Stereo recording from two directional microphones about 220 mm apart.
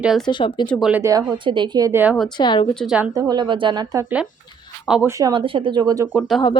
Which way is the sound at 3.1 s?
15° right (ahead or behind).